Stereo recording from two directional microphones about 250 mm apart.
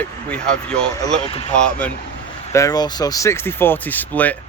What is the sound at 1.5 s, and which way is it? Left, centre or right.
Speech, centre.